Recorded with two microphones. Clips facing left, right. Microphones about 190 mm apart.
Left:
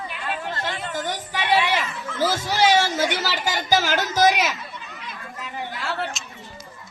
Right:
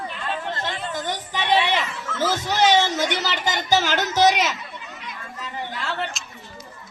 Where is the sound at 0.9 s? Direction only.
10° left (ahead or behind).